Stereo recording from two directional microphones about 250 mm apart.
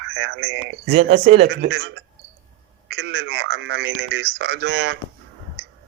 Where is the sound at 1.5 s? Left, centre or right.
Right.